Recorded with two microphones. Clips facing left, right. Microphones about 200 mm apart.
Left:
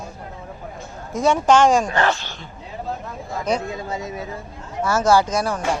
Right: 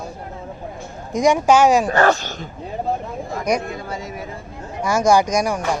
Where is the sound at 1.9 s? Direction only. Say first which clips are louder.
Right 5 dB; 40° right (ahead or behind).